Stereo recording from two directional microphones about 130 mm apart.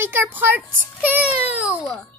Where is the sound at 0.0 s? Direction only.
15° right (ahead or behind).